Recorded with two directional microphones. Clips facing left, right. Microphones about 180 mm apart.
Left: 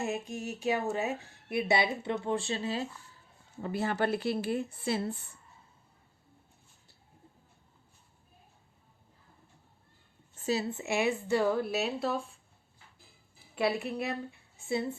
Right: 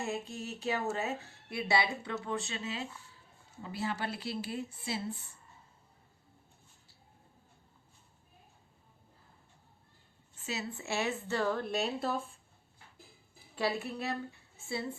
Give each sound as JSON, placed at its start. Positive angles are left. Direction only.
{"t": 0.0, "sound": "speech", "side_deg": 15}
{"t": 3.6, "sound": "speech", "side_deg": 55}
{"t": 10.3, "sound": "a sound", "side_deg": 35}
{"t": 10.7, "sound": "speech", "side_deg": 20}
{"t": 13.6, "sound": "speech", "side_deg": 15}